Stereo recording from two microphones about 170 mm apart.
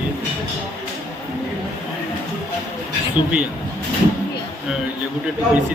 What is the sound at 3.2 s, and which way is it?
Speech, 30° left (ahead or behind).